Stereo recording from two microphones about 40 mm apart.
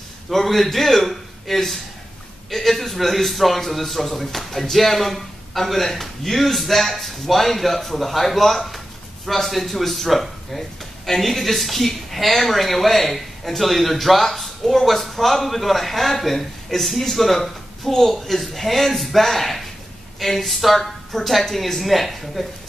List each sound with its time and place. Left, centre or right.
0.3 s speech: centre